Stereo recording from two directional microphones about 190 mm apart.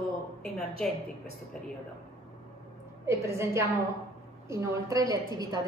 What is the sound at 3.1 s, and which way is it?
A woman's voice, 15° right (ahead or behind).